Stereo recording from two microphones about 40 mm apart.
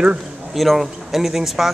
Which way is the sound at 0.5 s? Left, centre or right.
Centre.